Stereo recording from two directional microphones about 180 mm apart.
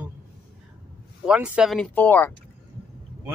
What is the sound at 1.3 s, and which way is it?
Speech, 5° right (ahead or behind).